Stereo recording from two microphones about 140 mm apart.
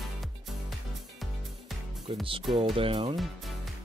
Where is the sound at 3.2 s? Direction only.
Centre (ahead or behind).